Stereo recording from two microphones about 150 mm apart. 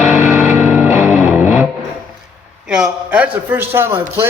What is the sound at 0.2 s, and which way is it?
Music, 15° right (ahead or behind).